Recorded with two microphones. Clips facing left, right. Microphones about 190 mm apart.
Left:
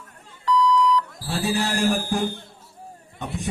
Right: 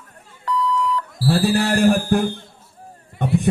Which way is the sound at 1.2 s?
60° right (ahead or behind).